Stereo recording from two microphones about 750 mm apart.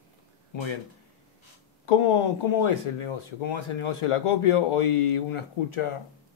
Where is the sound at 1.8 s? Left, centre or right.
Left.